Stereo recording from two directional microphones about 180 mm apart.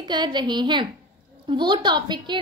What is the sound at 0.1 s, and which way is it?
A woman's voice, 25° right (ahead or behind).